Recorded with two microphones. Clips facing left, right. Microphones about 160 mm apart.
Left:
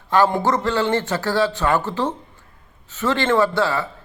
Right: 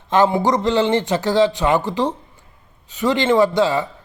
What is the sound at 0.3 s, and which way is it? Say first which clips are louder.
A man's voice: right 3 dB; 15° right (ahead or behind).